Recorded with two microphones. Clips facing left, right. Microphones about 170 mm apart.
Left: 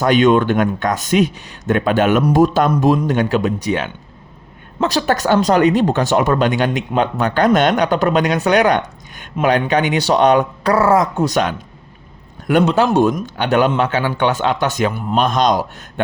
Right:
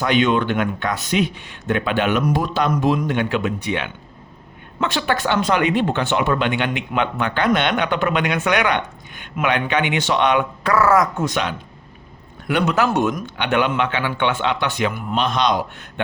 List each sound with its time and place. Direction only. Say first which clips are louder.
0.0 s speech: left 5 dB; 45° left (ahead or behind); by 11.3 s 30° left (ahead or behind)
11.3 s speech: left 5 dB; 45° left (ahead or behind)
12.6 s speech: left 3 dB; 30° left (ahead or behind)